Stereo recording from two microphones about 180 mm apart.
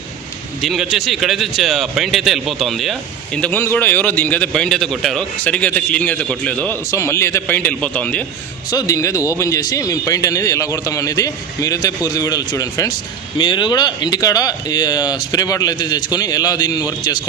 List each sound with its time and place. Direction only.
0.6 s a man's voice: centre (ahead or behind)
8.7 s speech: 20° left (ahead or behind)